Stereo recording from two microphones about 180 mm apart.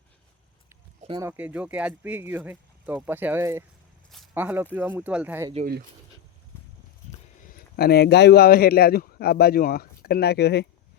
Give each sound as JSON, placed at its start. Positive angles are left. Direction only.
{"t": 1.2, "sound": "speech", "side_deg": -10}
{"t": 7.4, "sound": "a man's voice", "side_deg": 55}